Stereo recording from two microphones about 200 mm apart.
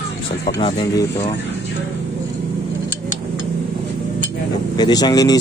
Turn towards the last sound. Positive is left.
turn(degrees=20)  # may be behind; listen again after turning